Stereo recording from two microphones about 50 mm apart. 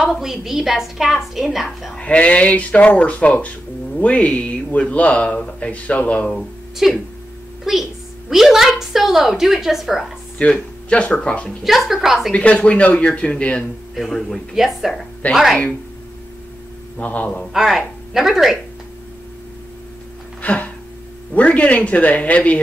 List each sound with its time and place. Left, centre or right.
0.1 s a woman's voice: centre
2.0 s speech: left
6.8 s a woman's voice: centre
10.5 s speech: left
11.4 s a woman's voice: centre
12.3 s speech: left
13.9 s a woman's voice: centre
17.0 s speech: left
17.5 s a woman's voice: centre
20.4 s a sound: left
21.4 s speech: left